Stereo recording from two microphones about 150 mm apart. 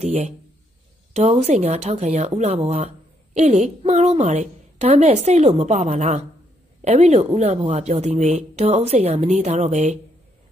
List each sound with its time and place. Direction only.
0.0 s a woman's voice: 45° right (ahead or behind)